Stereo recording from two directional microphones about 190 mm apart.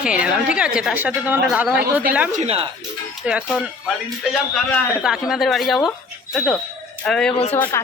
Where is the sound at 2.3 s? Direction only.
35° right (ahead or behind).